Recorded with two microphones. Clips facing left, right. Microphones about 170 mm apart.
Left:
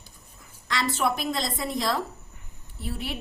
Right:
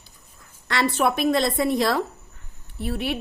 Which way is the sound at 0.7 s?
60° right (ahead or behind).